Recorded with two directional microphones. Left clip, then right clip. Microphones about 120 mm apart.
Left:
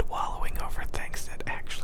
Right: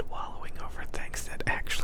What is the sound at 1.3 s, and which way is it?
Whispering, 20° right (ahead or behind).